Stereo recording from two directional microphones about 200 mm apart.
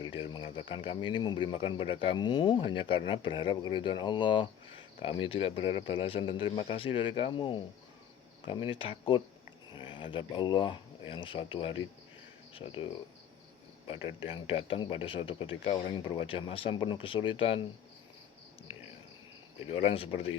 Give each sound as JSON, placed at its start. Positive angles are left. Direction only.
{"t": 0.3, "sound": "speech", "side_deg": 25}
{"t": 19.5, "sound": "speech", "side_deg": 30}